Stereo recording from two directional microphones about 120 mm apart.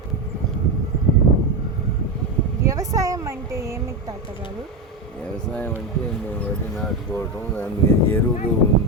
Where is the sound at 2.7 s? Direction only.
30° right (ahead or behind).